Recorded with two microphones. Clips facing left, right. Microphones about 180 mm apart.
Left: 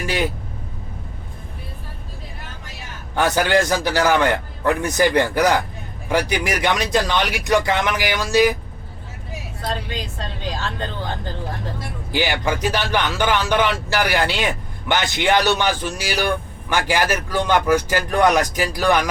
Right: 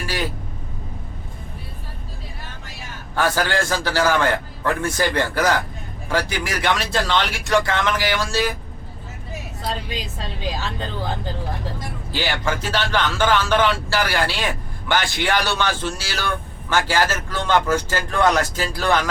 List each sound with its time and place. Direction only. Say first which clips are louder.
0.0 s vehicle: left 4 dB; 20° left (ahead or behind)
3.2 s speech: left 3 dB; 20° left (ahead or behind)
12.1 s speech: left 3 dB; 15° left (ahead or behind)